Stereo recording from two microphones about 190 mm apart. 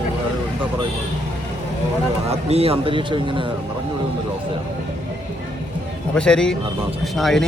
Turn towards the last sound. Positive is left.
turn(degrees=0)  # may be behind; listen again after turning